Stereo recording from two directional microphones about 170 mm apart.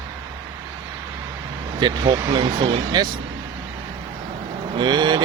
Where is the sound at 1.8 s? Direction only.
25° right (ahead or behind).